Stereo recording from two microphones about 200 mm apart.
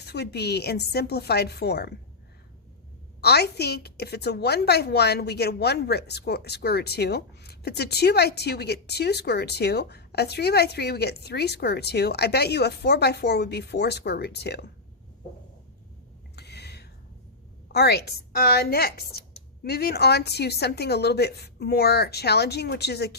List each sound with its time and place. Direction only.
0.0 s speech: 55° left (ahead or behind)
3.2 s a woman's voice: 55° left (ahead or behind)
16.3 s a sound: 55° left (ahead or behind)
17.7 s a woman's voice: 55° left (ahead or behind)